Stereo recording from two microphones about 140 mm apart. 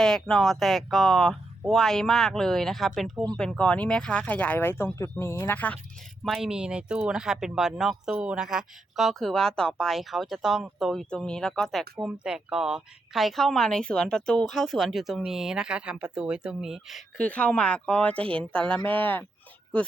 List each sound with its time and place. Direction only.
0.0 s speech: 5° left (ahead or behind)
6.2 s speech: centre (ahead or behind)
17.2 s speech: 10° left (ahead or behind)
18.2 s speech: 40° right (ahead or behind)
18.5 s speech: 10° left (ahead or behind)